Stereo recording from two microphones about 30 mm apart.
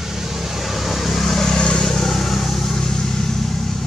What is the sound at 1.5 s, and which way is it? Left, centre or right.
Vehicle, left.